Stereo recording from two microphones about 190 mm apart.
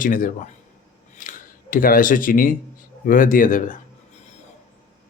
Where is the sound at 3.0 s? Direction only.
45° left (ahead or behind).